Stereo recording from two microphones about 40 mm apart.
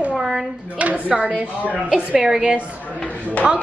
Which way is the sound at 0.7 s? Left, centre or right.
Right.